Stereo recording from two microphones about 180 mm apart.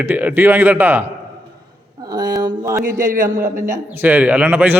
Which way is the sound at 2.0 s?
20° right (ahead or behind).